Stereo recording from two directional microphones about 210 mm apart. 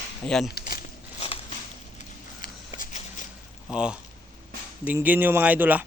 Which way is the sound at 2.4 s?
40° left (ahead or behind).